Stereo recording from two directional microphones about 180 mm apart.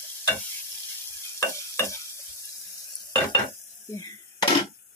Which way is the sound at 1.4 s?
15° left (ahead or behind).